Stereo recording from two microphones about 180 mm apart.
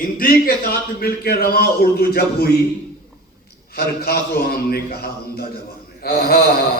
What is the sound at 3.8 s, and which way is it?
Speech, 60° left (ahead or behind).